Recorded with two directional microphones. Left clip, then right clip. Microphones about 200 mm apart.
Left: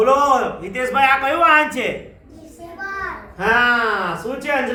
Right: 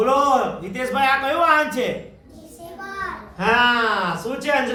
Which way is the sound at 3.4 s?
50° left (ahead or behind).